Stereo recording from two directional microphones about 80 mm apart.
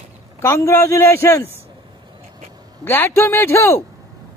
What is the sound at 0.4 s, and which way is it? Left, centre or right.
Speech, left.